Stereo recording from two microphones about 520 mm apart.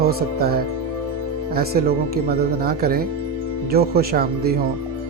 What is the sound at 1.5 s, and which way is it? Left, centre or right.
Speech, centre.